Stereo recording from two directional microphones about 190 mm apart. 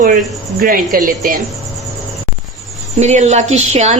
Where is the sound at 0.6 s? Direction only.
50° right (ahead or behind).